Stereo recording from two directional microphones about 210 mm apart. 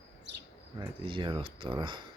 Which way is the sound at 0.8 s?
25° right (ahead or behind).